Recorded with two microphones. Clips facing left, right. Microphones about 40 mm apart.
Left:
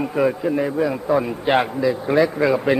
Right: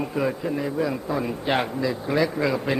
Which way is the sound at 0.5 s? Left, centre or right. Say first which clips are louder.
Left 5 dB; left.